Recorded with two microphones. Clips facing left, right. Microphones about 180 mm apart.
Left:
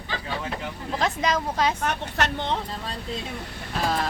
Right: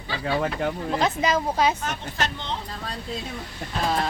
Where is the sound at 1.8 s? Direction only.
65° left (ahead or behind).